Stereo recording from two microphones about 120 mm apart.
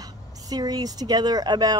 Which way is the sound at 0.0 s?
30° right (ahead or behind).